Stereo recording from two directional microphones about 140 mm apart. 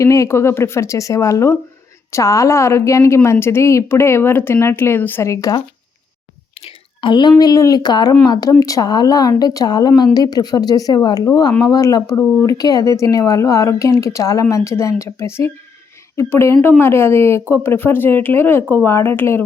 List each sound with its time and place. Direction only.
0.0 s a woman's voice: 20° left (ahead or behind)
6.7 s a woman's voice: 35° left (ahead or behind); by 19.4 s 15° left (ahead or behind)